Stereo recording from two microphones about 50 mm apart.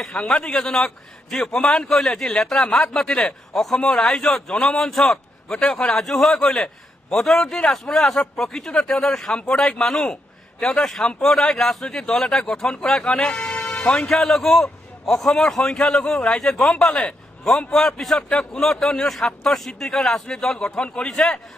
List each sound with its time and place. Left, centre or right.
0.1 s a man's voice: left
13.3 s music: centre
13.7 s a man's voice: centre
21.1 s a man's voice: centre